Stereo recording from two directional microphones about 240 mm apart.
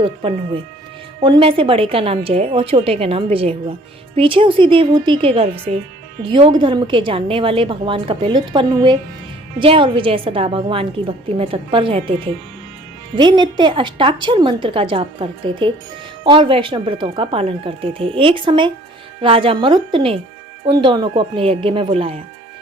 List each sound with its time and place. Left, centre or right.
0.0 s a woman's voice: right